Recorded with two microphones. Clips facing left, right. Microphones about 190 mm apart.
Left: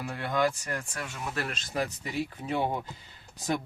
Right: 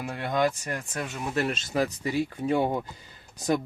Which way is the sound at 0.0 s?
20° right (ahead or behind).